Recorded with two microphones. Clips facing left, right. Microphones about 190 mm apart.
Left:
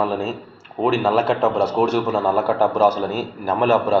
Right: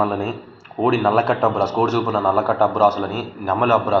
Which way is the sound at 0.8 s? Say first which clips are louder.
Right 1 dB; 5° left (ahead or behind).